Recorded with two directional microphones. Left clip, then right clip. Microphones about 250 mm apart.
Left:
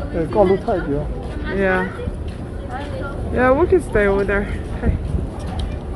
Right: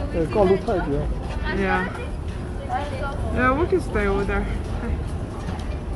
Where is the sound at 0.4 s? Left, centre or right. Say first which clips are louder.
Left 4 dB; left.